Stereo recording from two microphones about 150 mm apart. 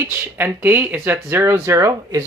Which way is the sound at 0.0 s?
15° right (ahead or behind).